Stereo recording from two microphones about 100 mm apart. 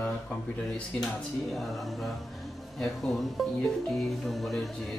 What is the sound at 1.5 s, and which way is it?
Speech, centre (ahead or behind).